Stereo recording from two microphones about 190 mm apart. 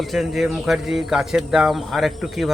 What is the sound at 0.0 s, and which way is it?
Speech, centre (ahead or behind).